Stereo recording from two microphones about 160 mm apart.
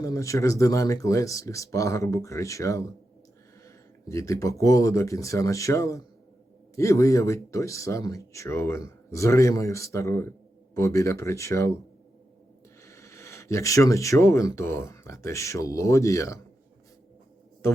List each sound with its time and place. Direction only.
0.0 s speech: 20° left (ahead or behind)
4.1 s speech: 20° left (ahead or behind)
12.8 s speech: 20° left (ahead or behind)